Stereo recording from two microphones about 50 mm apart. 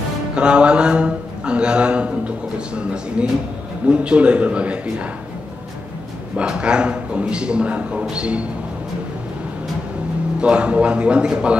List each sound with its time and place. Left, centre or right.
0.4 s speech: right
6.3 s speech: right
10.4 s speech: right